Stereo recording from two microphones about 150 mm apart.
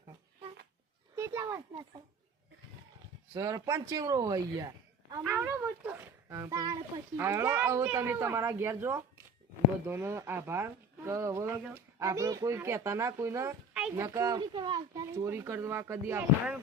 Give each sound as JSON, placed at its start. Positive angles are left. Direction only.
{"t": 1.1, "sound": "a sound", "side_deg": -20}
{"t": 3.3, "sound": "speech", "side_deg": -20}
{"t": 5.2, "sound": "speech", "side_deg": -10}
{"t": 7.2, "sound": "speech", "side_deg": -15}
{"t": 15.1, "sound": "speech", "side_deg": -20}